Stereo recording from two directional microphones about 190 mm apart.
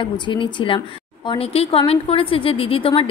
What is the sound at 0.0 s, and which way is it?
Speech, 25° left (ahead or behind).